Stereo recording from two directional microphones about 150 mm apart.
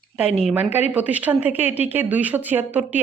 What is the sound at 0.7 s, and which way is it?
Speech, 10° right (ahead or behind).